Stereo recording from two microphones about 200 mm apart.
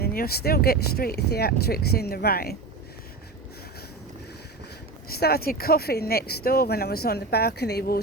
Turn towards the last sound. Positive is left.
turn(degrees=55)  # may be behind; listen again after turning